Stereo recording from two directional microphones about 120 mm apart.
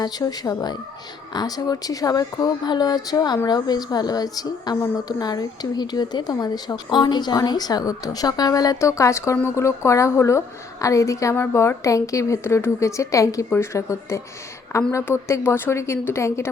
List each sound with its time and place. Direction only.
0.0 s a woman's voice: 35° left (ahead or behind)